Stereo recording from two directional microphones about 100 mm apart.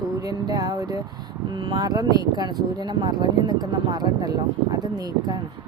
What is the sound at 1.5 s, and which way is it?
Speech, 50° right (ahead or behind).